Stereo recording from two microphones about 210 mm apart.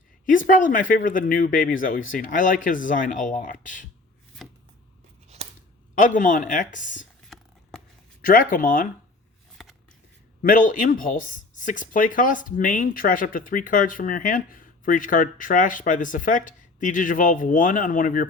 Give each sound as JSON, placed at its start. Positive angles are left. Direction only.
{"t": 0.3, "sound": "speech", "side_deg": 40}
{"t": 5.9, "sound": "speech", "side_deg": 40}
{"t": 8.2, "sound": "speech", "side_deg": 40}
{"t": 10.4, "sound": "speech", "side_deg": 40}